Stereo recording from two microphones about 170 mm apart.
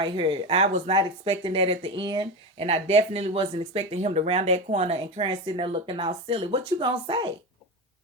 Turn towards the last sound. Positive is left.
turn(degrees=-30)  # may be behind; listen again after turning